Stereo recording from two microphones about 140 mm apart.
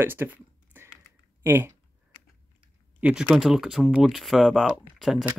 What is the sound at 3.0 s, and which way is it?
Speech, 10° right (ahead or behind).